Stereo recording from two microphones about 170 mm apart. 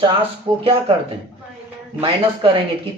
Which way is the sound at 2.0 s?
30° right (ahead or behind).